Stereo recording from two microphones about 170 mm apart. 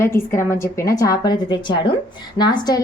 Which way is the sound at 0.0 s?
15° left (ahead or behind).